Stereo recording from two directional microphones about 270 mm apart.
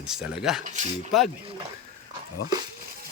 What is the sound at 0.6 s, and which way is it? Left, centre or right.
Speech, right.